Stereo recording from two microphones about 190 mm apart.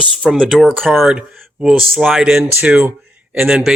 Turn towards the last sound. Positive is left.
turn(degrees=-5)  # may be behind; listen again after turning